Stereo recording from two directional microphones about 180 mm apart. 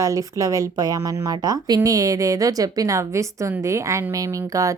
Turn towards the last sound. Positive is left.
turn(degrees=-20)  # may be behind; listen again after turning